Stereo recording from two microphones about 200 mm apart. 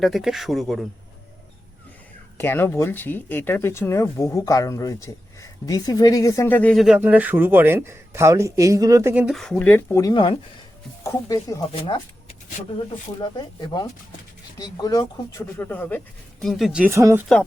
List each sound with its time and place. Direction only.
0.0 s speech: centre (ahead or behind)
2.4 s speech: 10° left (ahead or behind); by 9.2 s 15° right (ahead or behind)
9.2 s speech: centre (ahead or behind)
11.7 s speech: 25° left (ahead or behind); by 17.2 s 15° right (ahead or behind)